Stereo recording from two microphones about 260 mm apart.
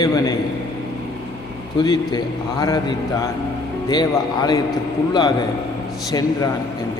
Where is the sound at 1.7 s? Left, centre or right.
Centre.